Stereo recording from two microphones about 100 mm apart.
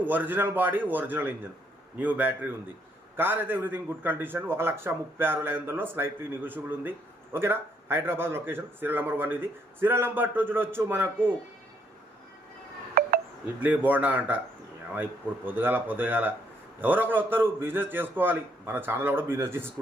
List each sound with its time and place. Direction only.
0.0 s a man's voice: 15° right (ahead or behind)
13.6 s a man's voice: 15° right (ahead or behind)